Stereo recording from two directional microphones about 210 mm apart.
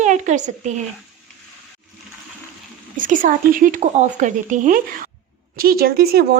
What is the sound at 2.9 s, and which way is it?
Speech, 40° right (ahead or behind).